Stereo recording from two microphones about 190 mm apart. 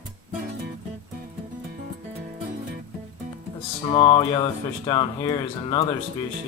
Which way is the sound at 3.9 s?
30° left (ahead or behind).